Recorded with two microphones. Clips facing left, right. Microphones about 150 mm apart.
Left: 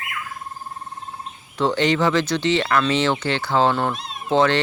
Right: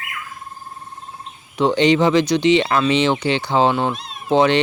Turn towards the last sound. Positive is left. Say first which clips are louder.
# right 3 dB
turn(degrees=-15)  # may be behind; listen again after turning